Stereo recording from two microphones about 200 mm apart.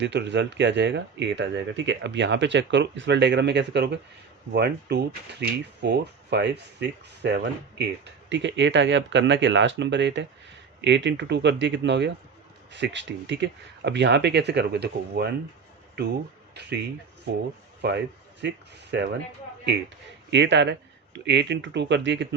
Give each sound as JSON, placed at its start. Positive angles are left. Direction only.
{"t": 0.0, "sound": "speech", "side_deg": -60}
{"t": 17.8, "sound": "speech", "side_deg": -60}
{"t": 20.3, "sound": "speech", "side_deg": -60}